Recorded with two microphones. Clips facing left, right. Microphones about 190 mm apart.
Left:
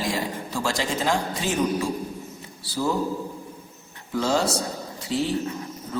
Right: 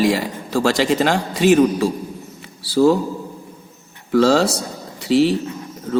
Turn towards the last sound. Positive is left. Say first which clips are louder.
# right 11 dB
turn(degrees=-65)  # may be behind; listen again after turning